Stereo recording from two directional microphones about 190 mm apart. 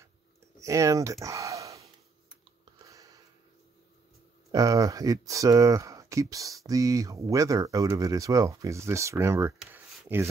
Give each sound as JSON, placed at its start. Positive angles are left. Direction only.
{"t": 0.6, "sound": "speech", "side_deg": -15}
{"t": 2.8, "sound": "a sound", "side_deg": -20}
{"t": 4.5, "sound": "speech", "side_deg": -20}